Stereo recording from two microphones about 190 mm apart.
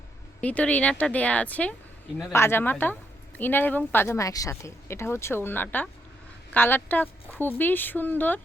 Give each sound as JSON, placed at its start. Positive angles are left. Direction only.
{"t": 0.4, "sound": "speech", "side_deg": 5}